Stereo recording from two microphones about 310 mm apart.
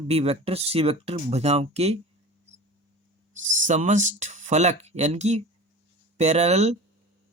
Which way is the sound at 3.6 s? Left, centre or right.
Right.